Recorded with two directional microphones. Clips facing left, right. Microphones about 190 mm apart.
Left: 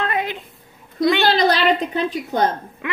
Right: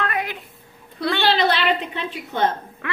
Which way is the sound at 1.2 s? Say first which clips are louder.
Left 3 dB; 40° left (ahead or behind).